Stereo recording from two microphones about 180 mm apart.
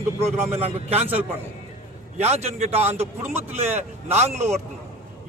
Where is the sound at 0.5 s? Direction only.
35° right (ahead or behind).